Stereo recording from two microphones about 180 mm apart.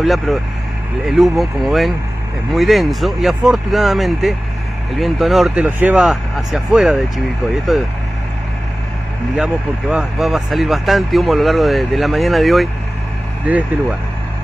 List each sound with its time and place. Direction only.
0.0 s speech: centre (ahead or behind)
9.4 s speech: 5° right (ahead or behind)